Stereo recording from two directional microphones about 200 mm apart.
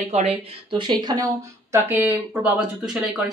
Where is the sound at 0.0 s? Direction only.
30° right (ahead or behind).